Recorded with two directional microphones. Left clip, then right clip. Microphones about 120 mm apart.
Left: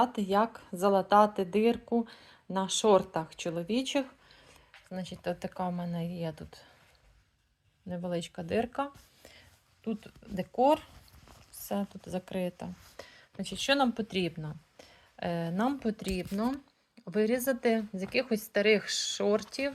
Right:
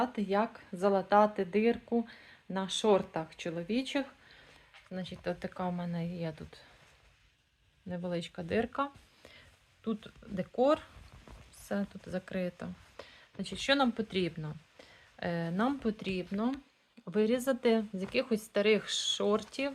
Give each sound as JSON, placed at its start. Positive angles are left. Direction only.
{"t": 0.0, "sound": "a woman's voice", "side_deg": 25}
{"t": 4.3, "sound": "speech", "side_deg": 5}
{"t": 7.9, "sound": "a woman's voice", "side_deg": 5}
{"t": 17.1, "sound": "a woman's voice", "side_deg": -10}